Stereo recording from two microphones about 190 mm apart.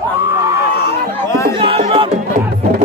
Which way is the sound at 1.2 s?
15° left (ahead or behind).